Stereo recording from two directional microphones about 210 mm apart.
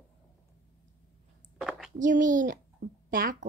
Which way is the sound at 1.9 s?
40° right (ahead or behind).